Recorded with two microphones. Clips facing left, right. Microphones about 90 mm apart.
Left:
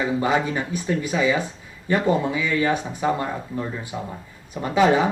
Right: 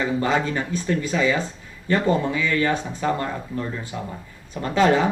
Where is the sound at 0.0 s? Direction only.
10° left (ahead or behind).